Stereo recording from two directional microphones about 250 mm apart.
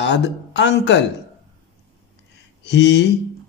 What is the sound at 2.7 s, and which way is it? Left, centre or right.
Speech, left.